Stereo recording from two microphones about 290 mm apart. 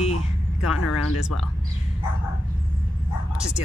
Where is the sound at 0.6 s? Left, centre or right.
Left.